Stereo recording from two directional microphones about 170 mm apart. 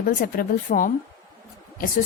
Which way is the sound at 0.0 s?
55° left (ahead or behind).